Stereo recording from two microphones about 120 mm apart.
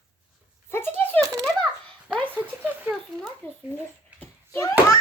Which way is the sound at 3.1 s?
5° left (ahead or behind).